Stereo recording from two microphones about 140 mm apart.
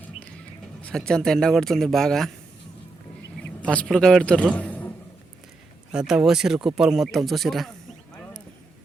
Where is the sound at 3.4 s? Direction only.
10° left (ahead or behind).